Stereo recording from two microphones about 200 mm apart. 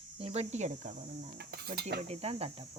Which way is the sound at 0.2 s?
30° right (ahead or behind).